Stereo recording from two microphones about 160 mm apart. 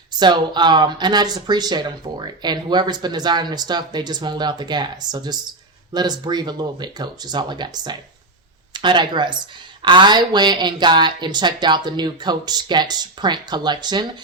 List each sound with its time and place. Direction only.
0.2 s speech: 30° right (ahead or behind)